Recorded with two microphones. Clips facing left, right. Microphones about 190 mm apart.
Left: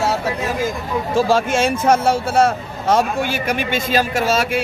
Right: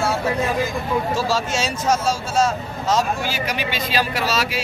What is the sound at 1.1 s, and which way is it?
Speech, 55° left (ahead or behind).